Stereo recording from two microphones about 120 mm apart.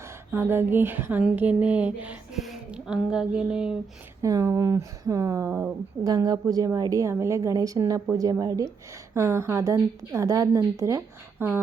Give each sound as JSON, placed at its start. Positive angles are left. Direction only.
{"t": 0.3, "sound": "a sound", "side_deg": -20}
{"t": 2.4, "sound": "speech", "side_deg": -5}
{"t": 4.2, "sound": "a woman's voice", "side_deg": -25}
{"t": 6.1, "sound": "a woman's voice", "side_deg": -30}